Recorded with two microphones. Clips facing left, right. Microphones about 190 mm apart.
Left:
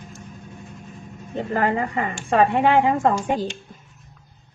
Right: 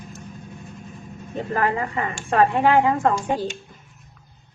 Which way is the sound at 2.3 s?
20° left (ahead or behind).